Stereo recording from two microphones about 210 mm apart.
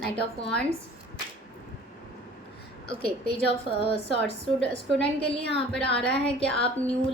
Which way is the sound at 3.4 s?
25° left (ahead or behind).